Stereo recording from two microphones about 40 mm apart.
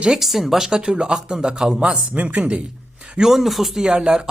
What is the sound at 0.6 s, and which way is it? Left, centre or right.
Speech, centre.